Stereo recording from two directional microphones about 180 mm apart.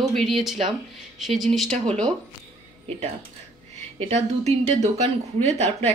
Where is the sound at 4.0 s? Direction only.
35° right (ahead or behind).